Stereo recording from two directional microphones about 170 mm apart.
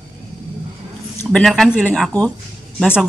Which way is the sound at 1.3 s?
Centre (ahead or behind).